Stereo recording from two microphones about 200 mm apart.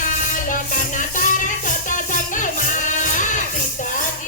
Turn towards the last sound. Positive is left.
turn(degrees=40)  # may be behind; listen again after turning